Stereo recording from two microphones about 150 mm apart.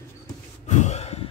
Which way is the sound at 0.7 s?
50° left (ahead or behind).